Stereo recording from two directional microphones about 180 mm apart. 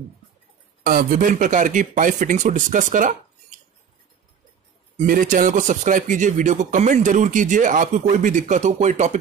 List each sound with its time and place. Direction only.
0.8 s speech: 50° right (ahead or behind)
4.9 s speech: 50° right (ahead or behind)